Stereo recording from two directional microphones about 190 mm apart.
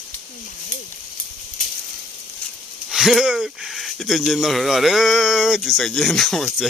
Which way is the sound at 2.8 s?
Centre (ahead or behind).